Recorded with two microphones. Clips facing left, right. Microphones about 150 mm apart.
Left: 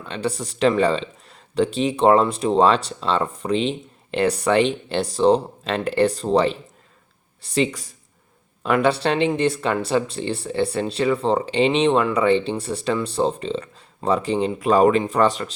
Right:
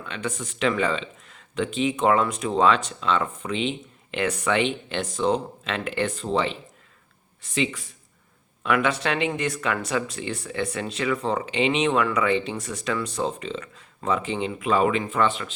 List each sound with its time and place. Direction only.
0.0 s speech: 35° left (ahead or behind)